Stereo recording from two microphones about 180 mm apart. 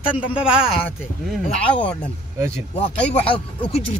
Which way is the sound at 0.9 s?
Centre (ahead or behind).